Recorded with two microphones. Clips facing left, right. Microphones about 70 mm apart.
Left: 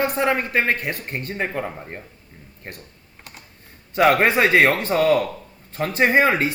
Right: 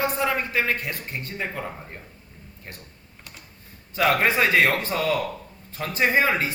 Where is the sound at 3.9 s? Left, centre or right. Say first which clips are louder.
Left 5 dB; left.